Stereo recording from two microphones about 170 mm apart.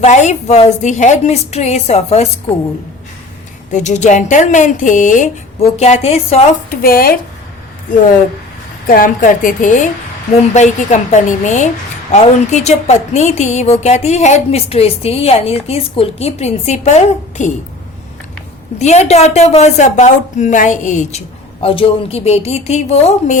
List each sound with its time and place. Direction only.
0.0 s a woman's voice: 45° left (ahead or behind)
3.7 s speech: 45° left (ahead or behind)
6.7 s speech: 60° left (ahead or behind)
8.9 s a woman's voice: 55° left (ahead or behind)
18.8 s a woman's voice: 40° left (ahead or behind)
21.6 s a woman's voice: 35° left (ahead or behind)